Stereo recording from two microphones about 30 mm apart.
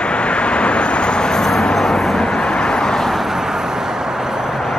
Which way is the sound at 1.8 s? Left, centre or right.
Centre.